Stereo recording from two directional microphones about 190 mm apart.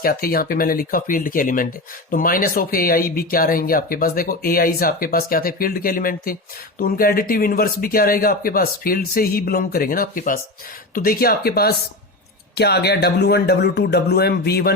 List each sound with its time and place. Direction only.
0.0 s speech: 50° left (ahead or behind)